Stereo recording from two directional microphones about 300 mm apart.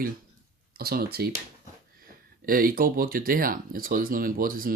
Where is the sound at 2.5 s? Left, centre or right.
Right.